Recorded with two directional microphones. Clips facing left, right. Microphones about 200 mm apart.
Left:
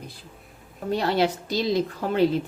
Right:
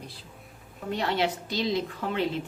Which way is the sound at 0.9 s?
35° left (ahead or behind).